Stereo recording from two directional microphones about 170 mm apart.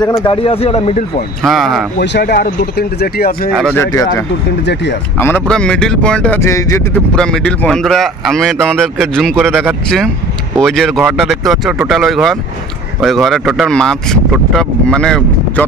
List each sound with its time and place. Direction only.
0.2 s a man's voice: 30° left (ahead or behind)
1.4 s speech: centre (ahead or behind)
2.0 s speech: 70° left (ahead or behind)
3.7 s speech: 20° left (ahead or behind)
5.2 s speech: 10° left (ahead or behind)
7.2 s speech: 5° left (ahead or behind)